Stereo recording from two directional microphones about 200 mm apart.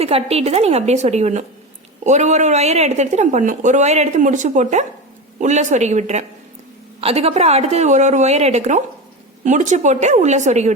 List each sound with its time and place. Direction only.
0.0 s speech: 30° right (ahead or behind)